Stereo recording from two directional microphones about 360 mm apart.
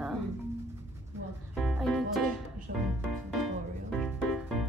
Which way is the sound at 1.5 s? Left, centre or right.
Centre.